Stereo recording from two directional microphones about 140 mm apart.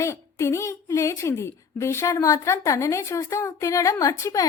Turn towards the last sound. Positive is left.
turn(degrees=25)  # may be behind; listen again after turning